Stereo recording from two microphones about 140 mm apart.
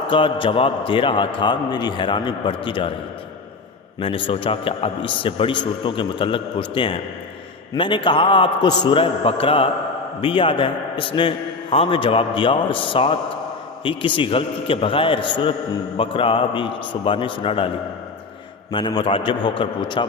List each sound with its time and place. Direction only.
0.1 s a man's voice: 35° left (ahead or behind)
4.0 s a man's voice: 40° left (ahead or behind)
18.7 s a man's voice: 35° left (ahead or behind)